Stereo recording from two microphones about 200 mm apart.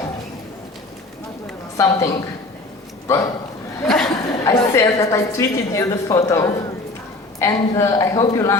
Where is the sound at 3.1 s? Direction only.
15° left (ahead or behind).